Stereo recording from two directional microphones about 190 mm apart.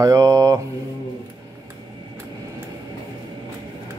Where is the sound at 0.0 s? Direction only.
15° right (ahead or behind).